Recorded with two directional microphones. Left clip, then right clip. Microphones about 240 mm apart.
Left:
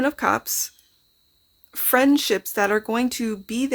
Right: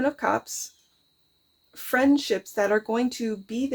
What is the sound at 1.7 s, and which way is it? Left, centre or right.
Speech, left.